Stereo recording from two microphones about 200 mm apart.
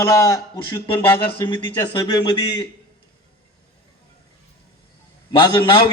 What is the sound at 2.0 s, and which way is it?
Speech, 20° left (ahead or behind).